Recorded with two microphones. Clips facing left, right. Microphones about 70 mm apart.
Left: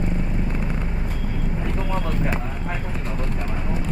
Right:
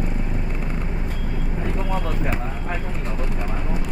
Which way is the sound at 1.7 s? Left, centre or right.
Centre.